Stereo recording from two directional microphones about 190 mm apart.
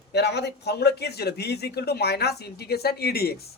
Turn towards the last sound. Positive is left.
turn(degrees=55)  # may be behind; listen again after turning